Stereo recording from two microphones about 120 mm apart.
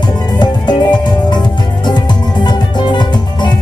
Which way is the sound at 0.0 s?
35° left (ahead or behind).